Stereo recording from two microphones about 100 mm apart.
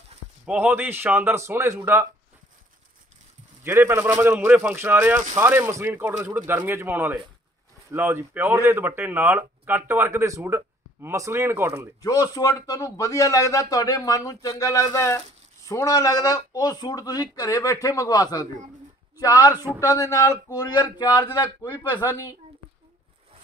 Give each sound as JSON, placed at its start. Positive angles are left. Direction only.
{"t": 0.5, "sound": "speech", "side_deg": -20}
{"t": 3.6, "sound": "speech", "side_deg": -25}
{"t": 12.0, "sound": "speech", "side_deg": 40}